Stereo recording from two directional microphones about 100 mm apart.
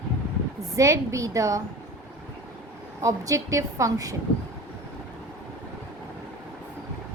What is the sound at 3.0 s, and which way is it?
A woman's voice, 35° right (ahead or behind).